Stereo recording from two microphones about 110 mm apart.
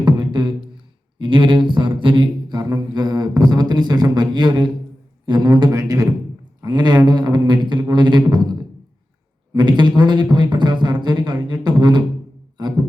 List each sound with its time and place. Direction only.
0.0 s beatboxing: 45° right (ahead or behind)
1.2 s a sound: 45° right (ahead or behind)
9.5 s speech: 40° right (ahead or behind)